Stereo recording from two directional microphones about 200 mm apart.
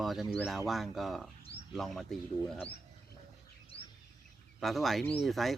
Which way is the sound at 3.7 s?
25° left (ahead or behind).